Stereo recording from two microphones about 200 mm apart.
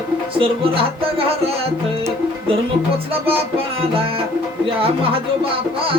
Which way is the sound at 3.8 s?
30° right (ahead or behind).